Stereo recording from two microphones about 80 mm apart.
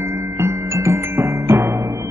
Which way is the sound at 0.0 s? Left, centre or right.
Right.